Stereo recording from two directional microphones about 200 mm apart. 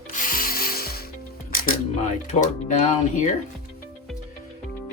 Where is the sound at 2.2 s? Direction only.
35° left (ahead or behind).